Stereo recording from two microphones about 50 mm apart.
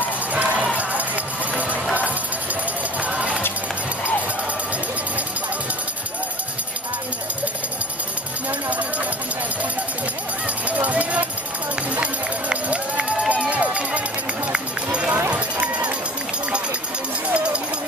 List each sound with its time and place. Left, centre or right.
0.3 s jingle bell: right
3.0 s music: right
8.5 s music: right
10.7 s music: right
11.7 s run: right
17.3 s run: right